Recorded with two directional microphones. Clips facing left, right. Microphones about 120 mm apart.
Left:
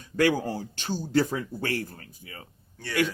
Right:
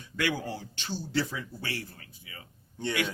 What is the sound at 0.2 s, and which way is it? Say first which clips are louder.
A man's voice: left 7 dB; 45° left (ahead or behind).